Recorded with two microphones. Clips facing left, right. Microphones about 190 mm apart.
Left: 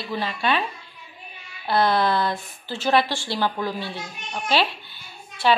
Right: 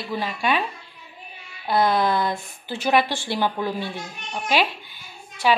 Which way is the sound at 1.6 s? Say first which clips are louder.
Even; 15° right (ahead or behind).